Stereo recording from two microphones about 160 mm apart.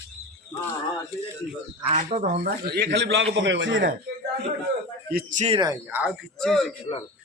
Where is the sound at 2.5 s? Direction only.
70° right (ahead or behind); by 3.9 s 90° right.